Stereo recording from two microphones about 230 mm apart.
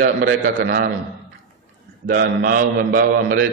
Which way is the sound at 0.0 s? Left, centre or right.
Right.